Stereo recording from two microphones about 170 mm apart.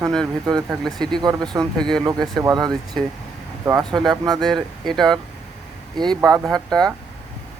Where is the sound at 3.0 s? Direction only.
5° left (ahead or behind).